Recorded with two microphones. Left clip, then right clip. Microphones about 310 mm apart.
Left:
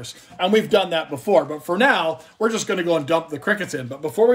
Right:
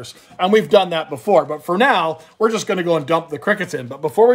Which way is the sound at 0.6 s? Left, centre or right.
Right.